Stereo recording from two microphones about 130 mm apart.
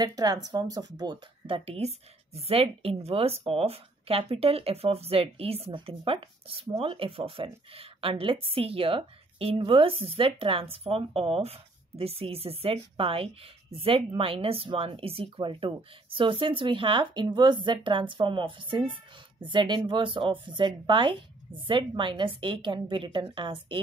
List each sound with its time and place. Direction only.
0.0 s speech: 30° right (ahead or behind)
1.5 s a woman's voice: 50° right (ahead or behind)